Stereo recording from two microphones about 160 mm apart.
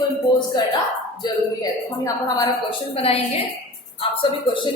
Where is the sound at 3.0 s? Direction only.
40° left (ahead or behind).